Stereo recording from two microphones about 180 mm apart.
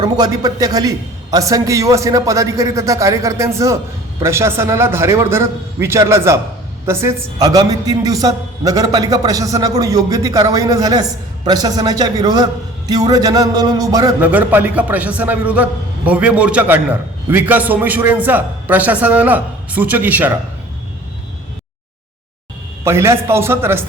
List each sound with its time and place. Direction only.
0.0 s a man's voice: 20° right (ahead or behind)
14.2 s a man's voice: 10° right (ahead or behind)
22.8 s a man's voice: 15° right (ahead or behind)